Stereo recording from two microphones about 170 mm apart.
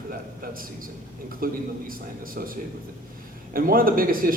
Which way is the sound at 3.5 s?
60° right (ahead or behind).